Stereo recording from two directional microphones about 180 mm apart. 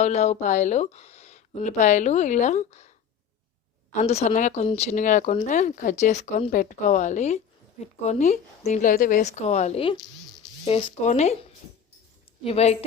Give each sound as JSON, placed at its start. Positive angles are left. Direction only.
{"t": 0.0, "sound": "speech", "side_deg": 40}
{"t": 3.9, "sound": "speech", "side_deg": 35}
{"t": 11.0, "sound": "speech", "side_deg": 40}
{"t": 12.4, "sound": "speech", "side_deg": 35}